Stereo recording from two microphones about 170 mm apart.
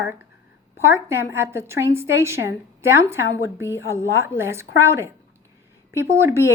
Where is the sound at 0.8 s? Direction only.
15° right (ahead or behind).